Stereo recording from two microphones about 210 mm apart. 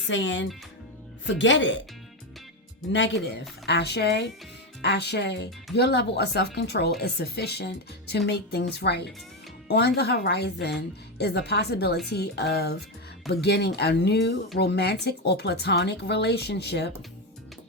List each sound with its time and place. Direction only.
0.1 s speech: 60° left (ahead or behind)
2.9 s speech: 55° left (ahead or behind)